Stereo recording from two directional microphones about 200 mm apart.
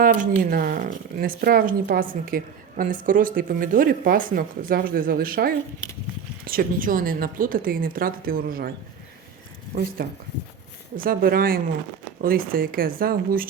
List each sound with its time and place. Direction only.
0.0 s speech: 45° right (ahead or behind)
9.7 s speech: 55° right (ahead or behind)
10.9 s speech: 45° right (ahead or behind)